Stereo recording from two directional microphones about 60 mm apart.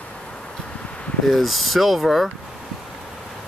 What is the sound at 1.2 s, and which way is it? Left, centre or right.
Speech, centre.